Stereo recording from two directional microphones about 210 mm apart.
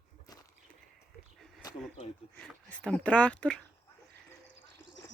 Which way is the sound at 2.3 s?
5° left (ahead or behind).